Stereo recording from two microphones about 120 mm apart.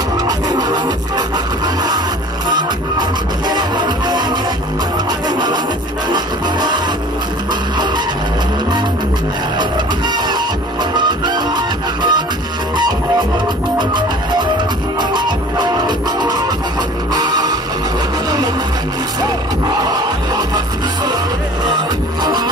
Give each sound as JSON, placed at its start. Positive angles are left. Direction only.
{"t": 0.5, "sound": "music", "side_deg": -35}
{"t": 2.5, "sound": "music", "side_deg": -40}
{"t": 6.1, "sound": "music", "side_deg": -40}
{"t": 9.6, "sound": "music", "side_deg": -40}
{"t": 15.0, "sound": "music", "side_deg": -40}
{"t": 19.8, "sound": "music", "side_deg": -35}